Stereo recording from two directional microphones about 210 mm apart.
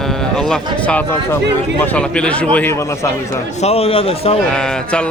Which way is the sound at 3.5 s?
30° left (ahead or behind).